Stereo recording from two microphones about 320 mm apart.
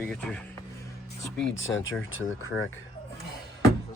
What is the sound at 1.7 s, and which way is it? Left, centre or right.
Speech, left.